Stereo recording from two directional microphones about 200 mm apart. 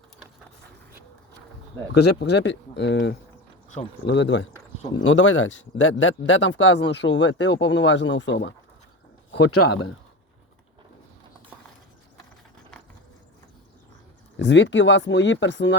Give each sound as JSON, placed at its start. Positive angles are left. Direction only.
{"t": 1.9, "sound": "speech", "side_deg": 55}
{"t": 14.3, "sound": "speech", "side_deg": 60}